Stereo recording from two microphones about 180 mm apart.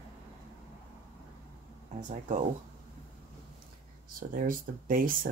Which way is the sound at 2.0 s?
45° right (ahead or behind).